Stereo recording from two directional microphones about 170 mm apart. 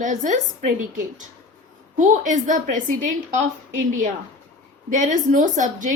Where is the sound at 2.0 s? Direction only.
45° right (ahead or behind).